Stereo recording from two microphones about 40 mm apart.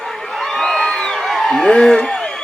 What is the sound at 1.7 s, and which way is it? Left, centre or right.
Speech, centre.